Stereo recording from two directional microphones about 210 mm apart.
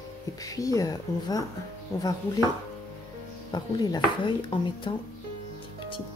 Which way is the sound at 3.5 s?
20° left (ahead or behind).